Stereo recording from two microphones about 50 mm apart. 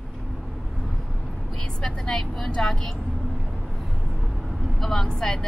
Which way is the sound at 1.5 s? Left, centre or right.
Centre.